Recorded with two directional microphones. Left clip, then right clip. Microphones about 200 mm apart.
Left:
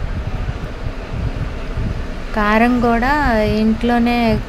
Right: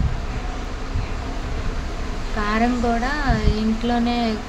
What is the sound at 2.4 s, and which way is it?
A woman's voice, 40° left (ahead or behind).